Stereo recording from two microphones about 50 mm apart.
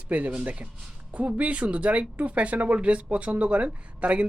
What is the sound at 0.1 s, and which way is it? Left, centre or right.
Speech, right.